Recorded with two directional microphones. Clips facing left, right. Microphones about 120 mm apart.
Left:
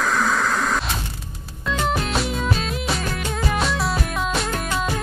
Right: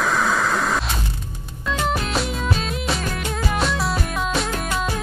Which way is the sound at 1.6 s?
Centre (ahead or behind).